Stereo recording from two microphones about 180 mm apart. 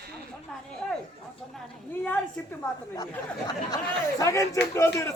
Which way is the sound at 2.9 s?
20° left (ahead or behind).